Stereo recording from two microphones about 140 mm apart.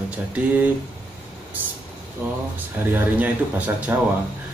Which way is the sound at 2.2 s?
15° right (ahead or behind).